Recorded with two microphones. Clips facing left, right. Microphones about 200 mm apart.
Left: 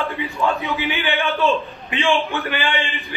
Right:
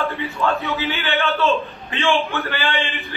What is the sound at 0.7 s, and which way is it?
A man's voice, 15° left (ahead or behind).